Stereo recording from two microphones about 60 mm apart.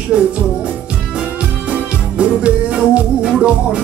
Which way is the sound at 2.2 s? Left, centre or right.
Centre.